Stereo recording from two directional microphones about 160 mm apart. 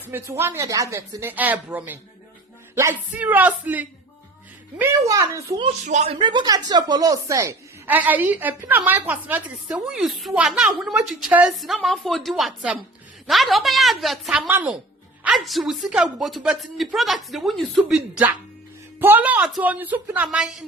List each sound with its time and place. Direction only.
0.1 s a woman's voice: 15° right (ahead or behind)
3.2 s a woman's voice: 10° right (ahead or behind)
5.8 s speech: 45° right (ahead or behind)
6.1 s a woman's voice: 30° right (ahead or behind); by 18.3 s 5° right (ahead or behind)
18.9 s a woman's voice: 15° right (ahead or behind)